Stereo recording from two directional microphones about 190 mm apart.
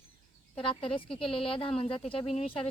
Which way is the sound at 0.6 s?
25° left (ahead or behind).